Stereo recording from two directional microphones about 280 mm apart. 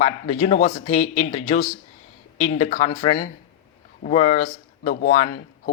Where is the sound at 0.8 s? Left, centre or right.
Left.